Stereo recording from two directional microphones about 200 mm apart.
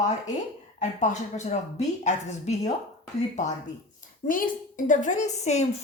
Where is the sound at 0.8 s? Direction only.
35° left (ahead or behind).